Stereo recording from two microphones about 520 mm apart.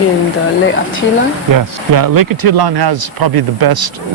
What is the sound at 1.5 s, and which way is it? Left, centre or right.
Speech, right.